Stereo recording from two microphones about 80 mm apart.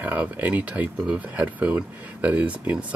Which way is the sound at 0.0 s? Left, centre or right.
Centre.